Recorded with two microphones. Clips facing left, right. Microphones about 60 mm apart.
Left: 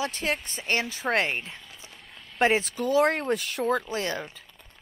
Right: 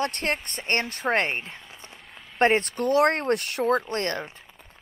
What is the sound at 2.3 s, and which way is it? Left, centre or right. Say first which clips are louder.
Speech: right 2 dB; centre.